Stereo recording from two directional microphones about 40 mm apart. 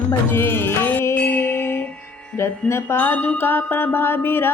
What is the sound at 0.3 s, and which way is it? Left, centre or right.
Wind chime, left.